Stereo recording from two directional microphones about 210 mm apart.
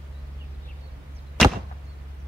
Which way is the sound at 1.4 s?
5° left (ahead or behind).